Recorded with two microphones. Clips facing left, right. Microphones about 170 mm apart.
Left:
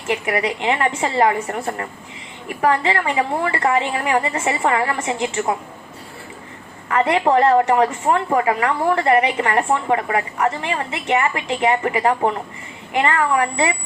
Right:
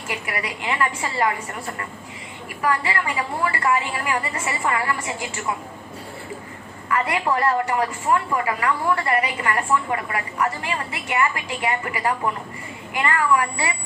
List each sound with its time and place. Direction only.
0.3 s a woman's voice: 30° left (ahead or behind)
1.5 s a woman's voice: 50° left (ahead or behind)
2.6 s a woman's voice: 30° left (ahead or behind)
6.9 s a woman's voice: 30° left (ahead or behind)